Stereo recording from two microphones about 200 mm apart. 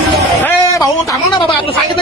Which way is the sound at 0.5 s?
15° left (ahead or behind).